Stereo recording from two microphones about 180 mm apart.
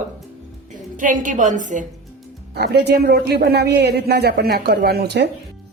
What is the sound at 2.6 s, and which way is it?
A man's voice, 65° right (ahead or behind).